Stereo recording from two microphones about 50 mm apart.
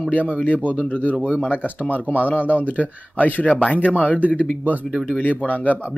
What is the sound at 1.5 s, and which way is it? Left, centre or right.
Speech, left.